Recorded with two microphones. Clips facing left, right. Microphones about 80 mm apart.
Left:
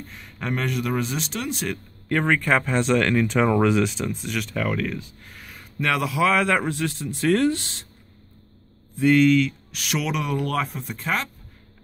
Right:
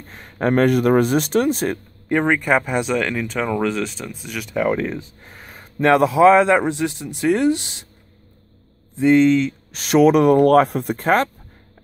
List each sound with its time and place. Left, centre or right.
0.1 s speech: right
2.0 s speech: centre
2.9 s speech: centre
4.6 s a man's voice: right
8.9 s speech: right
11.0 s speech: right